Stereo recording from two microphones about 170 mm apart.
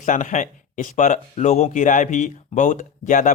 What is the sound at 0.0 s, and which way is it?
Speech, 50° left (ahead or behind).